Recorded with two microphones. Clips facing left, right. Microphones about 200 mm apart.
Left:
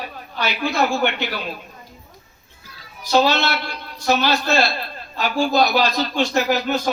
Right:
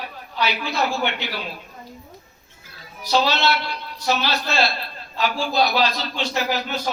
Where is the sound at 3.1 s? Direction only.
50° left (ahead or behind).